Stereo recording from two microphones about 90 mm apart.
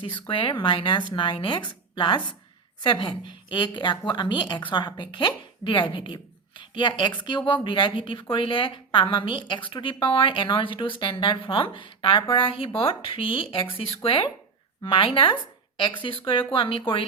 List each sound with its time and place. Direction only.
0.0 s a woman's voice: 70° left (ahead or behind)